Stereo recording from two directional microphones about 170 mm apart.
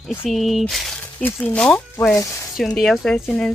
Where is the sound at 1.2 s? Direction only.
10° left (ahead or behind).